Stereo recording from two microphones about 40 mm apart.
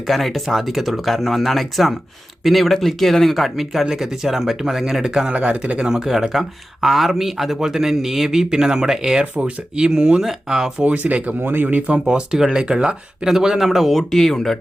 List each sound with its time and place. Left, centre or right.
0.1 s speech: centre
5.3 s speech: right
6.3 s speech: centre
10.8 s speech: right
11.4 s speech: right
12.0 s speech: centre
13.2 s speech: centre